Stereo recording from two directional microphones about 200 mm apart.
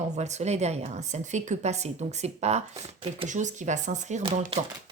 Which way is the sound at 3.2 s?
40° right (ahead or behind).